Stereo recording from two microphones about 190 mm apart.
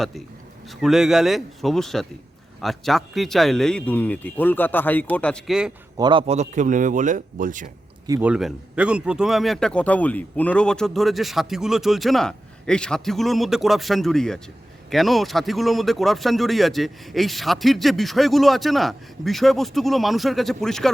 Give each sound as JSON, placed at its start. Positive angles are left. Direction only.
{"t": 0.7, "sound": "a man's voice", "side_deg": 0}
{"t": 6.0, "sound": "a man's voice", "side_deg": -25}
{"t": 8.0, "sound": "a man's voice", "side_deg": -15}
{"t": 8.3, "sound": "speech", "side_deg": -5}